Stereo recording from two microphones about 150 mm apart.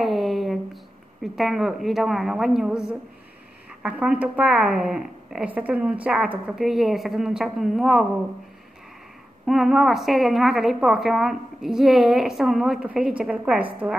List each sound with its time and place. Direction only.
0.0 s a sound: centre (ahead or behind)
1.2 s a woman's voice: centre (ahead or behind)
9.5 s a woman's voice: centre (ahead or behind)